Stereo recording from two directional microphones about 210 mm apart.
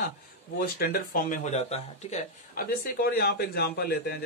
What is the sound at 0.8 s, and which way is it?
Speech, 45° left (ahead or behind).